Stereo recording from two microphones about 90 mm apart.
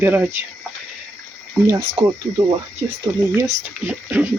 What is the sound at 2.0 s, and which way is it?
Speech, 85° right.